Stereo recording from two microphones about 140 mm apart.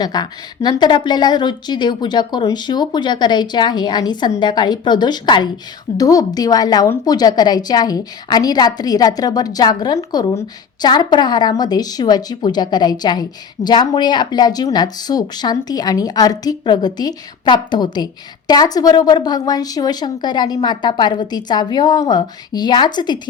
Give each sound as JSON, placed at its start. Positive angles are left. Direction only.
{"t": 0.0, "sound": "a woman's voice", "side_deg": 30}